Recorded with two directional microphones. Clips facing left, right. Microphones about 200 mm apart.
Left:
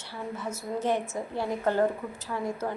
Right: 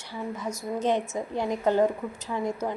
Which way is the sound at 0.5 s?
15° right (ahead or behind).